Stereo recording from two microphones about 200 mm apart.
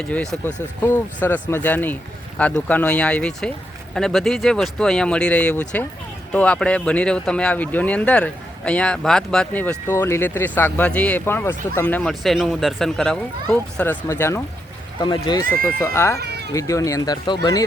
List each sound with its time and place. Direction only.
0.0 s speech: 5° left (ahead or behind)
16.1 s cat: 55° right (ahead or behind)
16.6 s speech: 15° left (ahead or behind)